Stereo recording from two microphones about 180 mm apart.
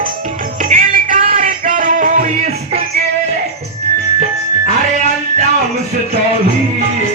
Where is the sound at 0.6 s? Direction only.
50° right (ahead or behind).